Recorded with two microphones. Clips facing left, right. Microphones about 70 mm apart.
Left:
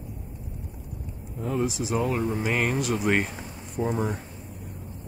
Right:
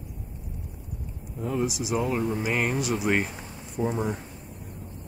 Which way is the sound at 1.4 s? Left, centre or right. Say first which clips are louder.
Left 1 dB; centre.